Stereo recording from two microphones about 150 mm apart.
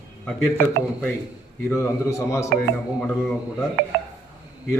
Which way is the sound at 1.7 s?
20° left (ahead or behind).